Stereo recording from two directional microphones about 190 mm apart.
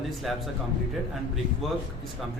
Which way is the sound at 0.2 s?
Centre (ahead or behind).